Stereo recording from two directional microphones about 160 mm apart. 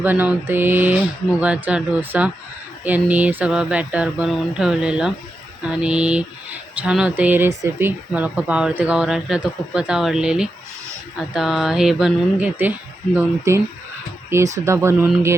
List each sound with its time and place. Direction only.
0.0 s speech: 10° right (ahead or behind)